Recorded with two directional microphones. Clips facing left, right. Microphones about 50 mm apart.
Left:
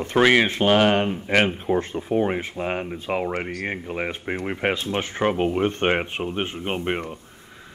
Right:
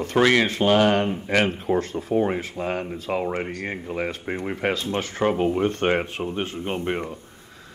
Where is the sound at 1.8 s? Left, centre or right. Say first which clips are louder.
Even; centre.